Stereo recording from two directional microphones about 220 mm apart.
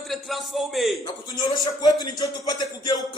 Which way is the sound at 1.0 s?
15° left (ahead or behind).